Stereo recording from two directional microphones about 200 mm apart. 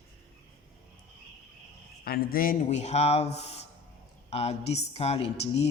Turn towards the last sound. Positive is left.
turn(degrees=30)  # may be behind; listen again after turning